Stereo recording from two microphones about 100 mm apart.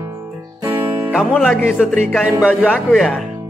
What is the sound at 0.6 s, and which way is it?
Music, 25° right (ahead or behind).